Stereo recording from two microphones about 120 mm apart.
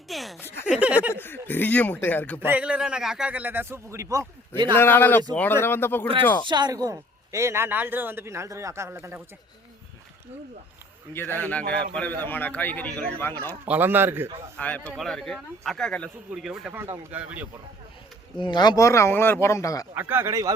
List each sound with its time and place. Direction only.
0.1 s a man's voice: centre (ahead or behind)
1.1 s speech: 20° left (ahead or behind)
2.4 s a man's voice: 15° right (ahead or behind)
4.7 s speech: 20° left (ahead or behind)
6.5 s a man's voice: 35° right (ahead or behind)
11.1 s speech: 20° left (ahead or behind)
13.7 s a man's voice: 15° right (ahead or behind)
14.5 s speech: 10° left (ahead or behind)
16.3 s a man's voice: 5° right (ahead or behind)
18.3 s speech: 40° left (ahead or behind)
19.9 s a man's voice: 20° right (ahead or behind)